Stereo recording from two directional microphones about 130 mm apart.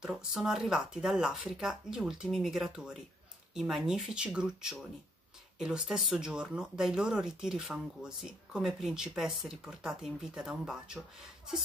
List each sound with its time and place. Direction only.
0.0 s speech: centre (ahead or behind)